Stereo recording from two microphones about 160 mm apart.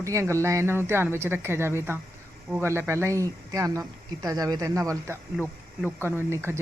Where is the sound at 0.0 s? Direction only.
20° right (ahead or behind).